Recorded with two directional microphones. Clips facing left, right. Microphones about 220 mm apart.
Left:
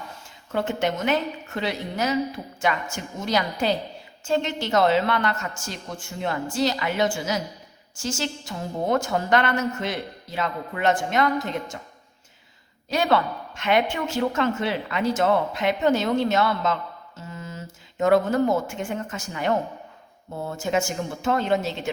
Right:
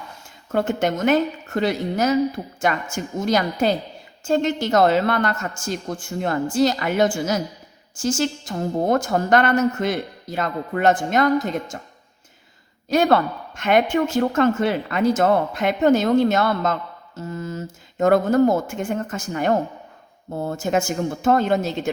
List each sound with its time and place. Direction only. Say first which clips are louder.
0.5 s a woman's voice: right 4 dB; 45° right (ahead or behind)
12.9 s a woman's voice: right 5 dB; 45° right (ahead or behind)
17.2 s mantra: right 9 dB; 40° right (ahead or behind)
18.0 s a woman's voice: right 4 dB; 45° right (ahead or behind)